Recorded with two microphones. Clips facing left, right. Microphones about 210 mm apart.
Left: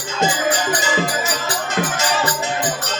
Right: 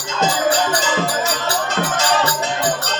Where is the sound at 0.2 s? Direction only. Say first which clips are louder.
Right 2 dB; 15° left (ahead or behind).